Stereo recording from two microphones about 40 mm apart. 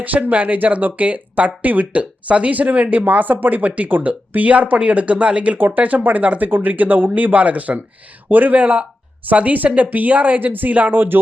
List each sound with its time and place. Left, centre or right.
0.0 s speech: right
5.5 s speech: right
5.8 s speech: right
8.5 s speech: right